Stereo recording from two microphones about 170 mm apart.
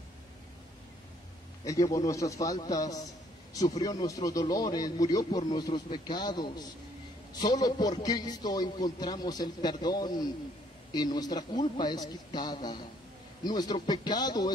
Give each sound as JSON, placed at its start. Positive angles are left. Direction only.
{"t": 1.6, "sound": "a man's voice", "side_deg": 20}